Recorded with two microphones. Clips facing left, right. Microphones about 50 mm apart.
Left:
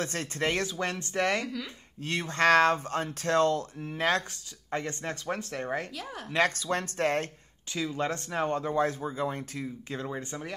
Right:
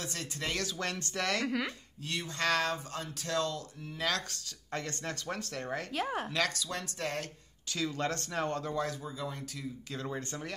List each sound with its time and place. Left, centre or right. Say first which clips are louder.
0.0 s speech: left 8 dB; left
0.7 s speech: left 5 dB; left
1.4 s speech: right 3 dB; right
2.0 s speech: left 8 dB; left
4.6 s speech: left 5 dB; left
5.9 s speech: right 6 dB; right
6.3 s speech: left 6 dB; left
7.7 s speech: left 3 dB; centre
8.7 s speech: left 7 dB; left
10.0 s speech: right 1 dB; centre